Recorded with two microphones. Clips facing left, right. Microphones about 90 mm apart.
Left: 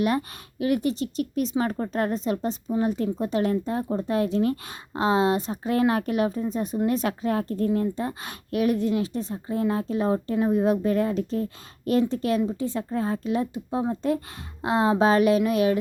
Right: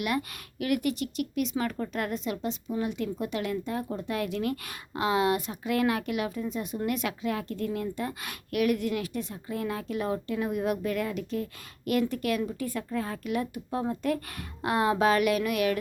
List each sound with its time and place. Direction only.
0.0 s a woman's voice: 35° left (ahead or behind)